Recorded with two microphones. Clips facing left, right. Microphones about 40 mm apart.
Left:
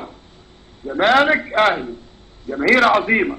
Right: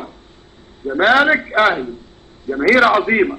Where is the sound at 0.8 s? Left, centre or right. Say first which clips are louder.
Right 2 dB; centre.